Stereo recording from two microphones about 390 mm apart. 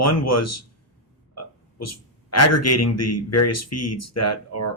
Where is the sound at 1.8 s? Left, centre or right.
Left.